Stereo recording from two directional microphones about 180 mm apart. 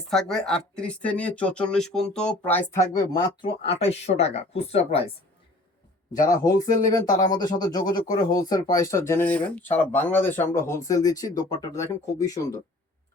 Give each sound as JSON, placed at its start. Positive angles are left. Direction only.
{"t": 0.1, "sound": "speech", "side_deg": 0}
{"t": 2.7, "sound": "speech", "side_deg": 20}
{"t": 3.4, "sound": "speech", "side_deg": 35}
{"t": 6.2, "sound": "speech", "side_deg": 20}